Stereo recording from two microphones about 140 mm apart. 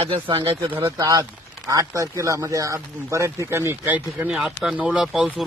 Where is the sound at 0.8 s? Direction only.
25° right (ahead or behind).